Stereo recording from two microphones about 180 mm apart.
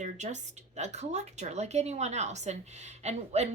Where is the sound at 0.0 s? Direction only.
40° right (ahead or behind).